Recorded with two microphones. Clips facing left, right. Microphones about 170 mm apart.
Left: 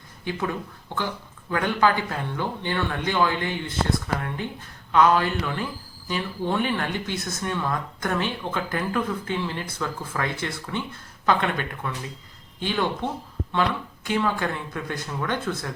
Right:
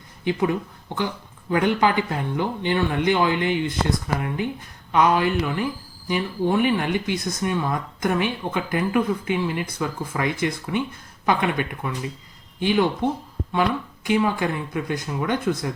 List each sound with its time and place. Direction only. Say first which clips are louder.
0.3 s speech: right 6 dB; 15° right (ahead or behind)